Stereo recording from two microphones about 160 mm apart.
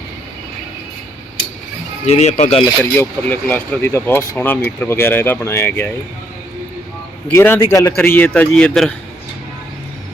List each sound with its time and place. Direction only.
2.0 s speech: 40° left (ahead or behind)
3.0 s speech: 10° left (ahead or behind)
7.3 s speech: 15° left (ahead or behind)